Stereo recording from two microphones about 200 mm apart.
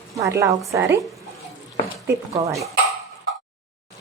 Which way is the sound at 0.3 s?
15° right (ahead or behind).